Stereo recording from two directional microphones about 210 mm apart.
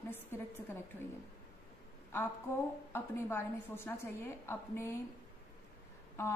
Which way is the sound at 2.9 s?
10° left (ahead or behind).